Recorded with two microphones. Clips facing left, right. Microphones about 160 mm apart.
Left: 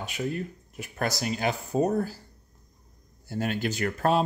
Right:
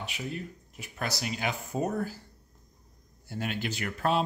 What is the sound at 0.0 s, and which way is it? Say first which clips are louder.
Speech: left 6 dB; 50° left (ahead or behind).